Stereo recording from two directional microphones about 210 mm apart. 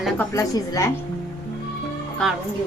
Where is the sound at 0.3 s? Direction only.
15° left (ahead or behind).